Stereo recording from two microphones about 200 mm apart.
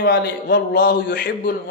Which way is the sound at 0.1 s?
55° left (ahead or behind).